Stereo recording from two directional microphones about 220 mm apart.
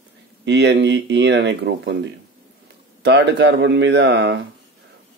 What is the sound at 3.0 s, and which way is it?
A man's voice, 50° right (ahead or behind).